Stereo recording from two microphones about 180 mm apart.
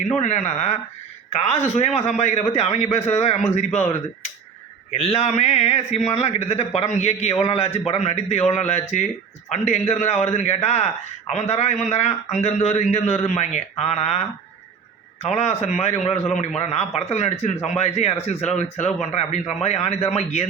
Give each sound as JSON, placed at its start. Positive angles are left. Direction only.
{"t": 0.2, "sound": "a man's voice", "side_deg": 40}